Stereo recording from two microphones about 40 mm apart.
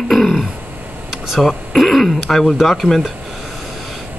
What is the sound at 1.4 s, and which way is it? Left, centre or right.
Speech, centre.